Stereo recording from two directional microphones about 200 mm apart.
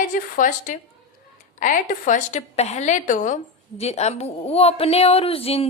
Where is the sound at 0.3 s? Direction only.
40° left (ahead or behind).